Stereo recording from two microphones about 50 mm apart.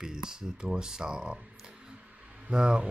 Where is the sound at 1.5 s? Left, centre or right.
Centre.